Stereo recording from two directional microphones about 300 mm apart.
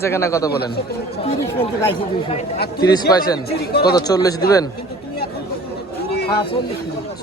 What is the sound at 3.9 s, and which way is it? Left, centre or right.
Speech, centre.